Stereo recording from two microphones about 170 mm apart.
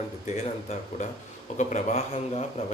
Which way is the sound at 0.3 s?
40° left (ahead or behind).